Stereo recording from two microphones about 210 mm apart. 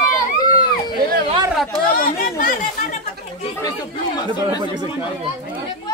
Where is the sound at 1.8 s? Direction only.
40° left (ahead or behind).